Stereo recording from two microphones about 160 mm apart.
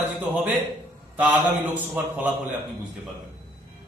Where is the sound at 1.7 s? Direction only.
10° right (ahead or behind).